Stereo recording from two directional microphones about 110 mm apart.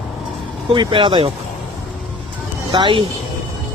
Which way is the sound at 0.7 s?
45° right (ahead or behind).